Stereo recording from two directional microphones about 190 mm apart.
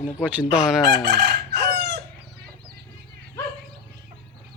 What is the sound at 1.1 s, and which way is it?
Chicken, 60° right (ahead or behind).